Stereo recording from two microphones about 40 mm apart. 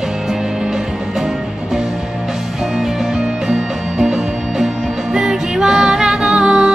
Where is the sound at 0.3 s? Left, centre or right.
Centre.